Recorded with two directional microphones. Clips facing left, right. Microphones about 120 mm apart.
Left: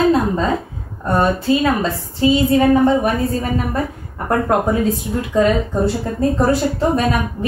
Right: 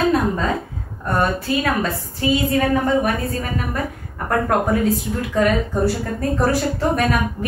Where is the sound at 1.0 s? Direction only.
25° left (ahead or behind).